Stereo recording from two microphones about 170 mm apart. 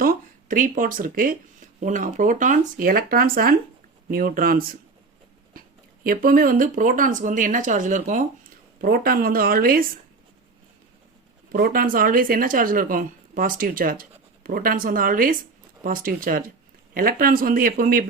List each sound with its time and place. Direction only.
0.0 s speech: 55° right (ahead or behind)
8.8 s speech: 60° right (ahead or behind)
11.5 s speech: 60° right (ahead or behind)